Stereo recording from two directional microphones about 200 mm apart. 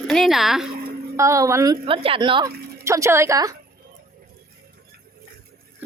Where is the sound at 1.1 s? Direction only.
15° right (ahead or behind).